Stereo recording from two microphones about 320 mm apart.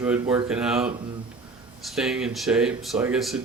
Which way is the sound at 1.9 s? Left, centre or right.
Centre.